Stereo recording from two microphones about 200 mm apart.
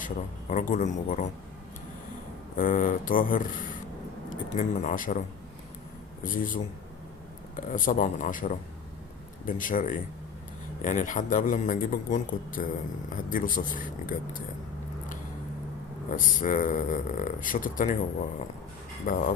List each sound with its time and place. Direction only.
0.0 s a man's voice: 40° left (ahead or behind)
2.6 s a man's voice: 40° left (ahead or behind)
6.2 s a man's voice: 40° left (ahead or behind)
16.1 s a man's voice: 40° left (ahead or behind)
19.0 s speech: 45° left (ahead or behind)